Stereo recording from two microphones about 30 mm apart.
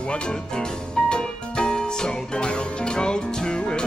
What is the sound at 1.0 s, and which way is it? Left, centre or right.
Music, left.